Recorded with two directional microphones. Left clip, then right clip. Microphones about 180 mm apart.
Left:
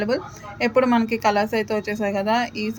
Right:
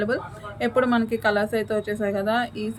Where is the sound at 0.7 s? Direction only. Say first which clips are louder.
Left 3 dB; 5° right (ahead or behind).